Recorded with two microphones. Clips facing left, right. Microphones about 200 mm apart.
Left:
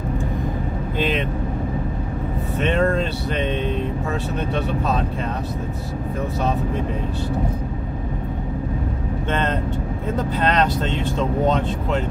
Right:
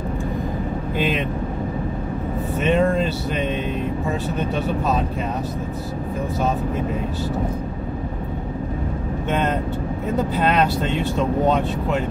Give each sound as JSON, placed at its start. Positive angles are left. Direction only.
{"t": 0.9, "sound": "speech", "side_deg": -5}
{"t": 2.6, "sound": "speech", "side_deg": -5}
{"t": 10.4, "sound": "speech", "side_deg": -5}